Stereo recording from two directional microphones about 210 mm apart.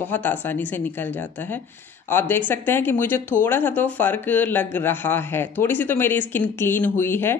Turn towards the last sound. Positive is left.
turn(degrees=10)  # may be behind; listen again after turning